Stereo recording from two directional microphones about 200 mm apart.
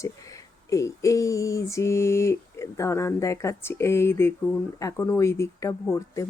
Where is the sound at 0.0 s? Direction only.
15° left (ahead or behind).